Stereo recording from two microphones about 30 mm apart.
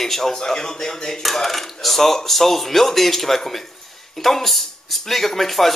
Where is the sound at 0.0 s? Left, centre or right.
Centre.